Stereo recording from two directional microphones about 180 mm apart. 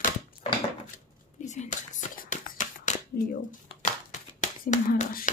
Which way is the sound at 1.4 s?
40° left (ahead or behind).